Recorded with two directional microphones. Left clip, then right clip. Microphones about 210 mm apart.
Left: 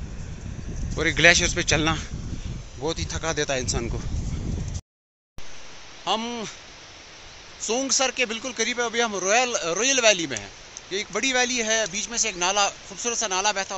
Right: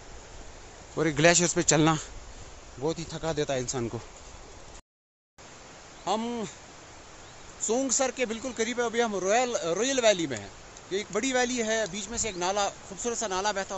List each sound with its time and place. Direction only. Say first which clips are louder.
0.9 s speech: left 5 dB; 15° right (ahead or behind)
2.8 s speech: left 3 dB; 5° right (ahead or behind)
6.0 s speech: left 4 dB; 5° right (ahead or behind)
7.6 s speech: left 4 dB; 5° right (ahead or behind)